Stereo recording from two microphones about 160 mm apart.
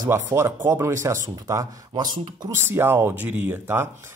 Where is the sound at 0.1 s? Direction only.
15° right (ahead or behind).